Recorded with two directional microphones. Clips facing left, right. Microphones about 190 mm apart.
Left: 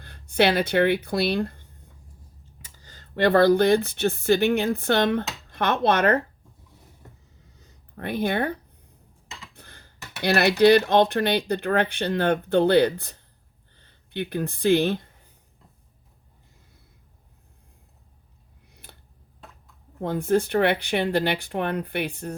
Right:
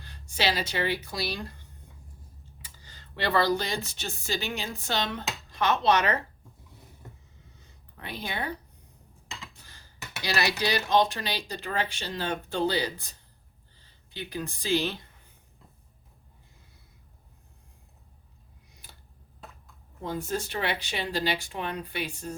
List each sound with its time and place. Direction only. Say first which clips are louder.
0.0 s speech: left 8 dB; 55° left (ahead or behind)
2.6 s speech: left 3 dB; 45° left (ahead or behind)
7.9 s speech: left 11 dB; 55° left (ahead or behind)
9.5 s a sound: left 5 dB; 60° left (ahead or behind)
10.6 s speech: left 9 dB; 55° left (ahead or behind)
18.7 s a sound: left 5 dB; 60° left (ahead or behind)
20.0 s speech: left 9 dB; 60° left (ahead or behind)